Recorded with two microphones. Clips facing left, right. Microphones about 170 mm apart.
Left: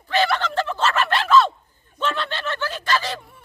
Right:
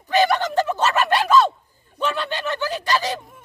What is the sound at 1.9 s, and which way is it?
Snicker, 10° right (ahead or behind).